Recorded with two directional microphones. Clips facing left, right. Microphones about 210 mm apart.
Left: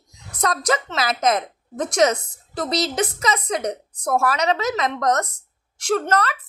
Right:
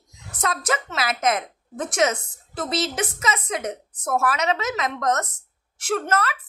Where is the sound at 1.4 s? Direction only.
35° left (ahead or behind).